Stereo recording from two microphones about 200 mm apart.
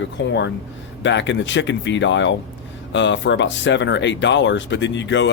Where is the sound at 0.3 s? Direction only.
65° left (ahead or behind).